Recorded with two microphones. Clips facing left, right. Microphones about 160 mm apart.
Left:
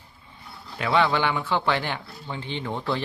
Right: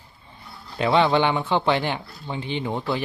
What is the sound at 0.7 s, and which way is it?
Speech, 25° right (ahead or behind).